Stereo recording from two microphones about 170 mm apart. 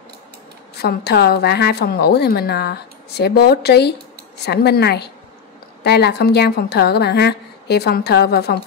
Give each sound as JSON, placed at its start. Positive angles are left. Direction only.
{"t": 0.7, "sound": "a woman's voice", "side_deg": 70}